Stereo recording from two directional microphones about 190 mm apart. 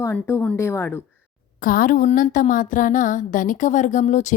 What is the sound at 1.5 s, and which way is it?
A woman's voice, 45° left (ahead or behind).